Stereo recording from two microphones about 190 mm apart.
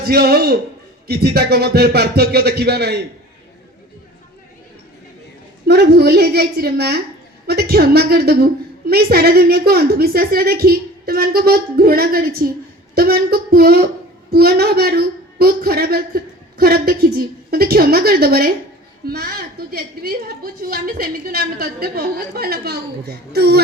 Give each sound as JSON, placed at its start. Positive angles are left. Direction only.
{"t": 0.0, "sound": "a woman's voice", "side_deg": -55}
{"t": 5.6, "sound": "a woman's voice", "side_deg": -60}